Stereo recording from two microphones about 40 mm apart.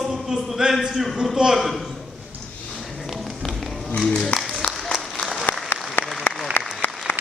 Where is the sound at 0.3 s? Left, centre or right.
Centre.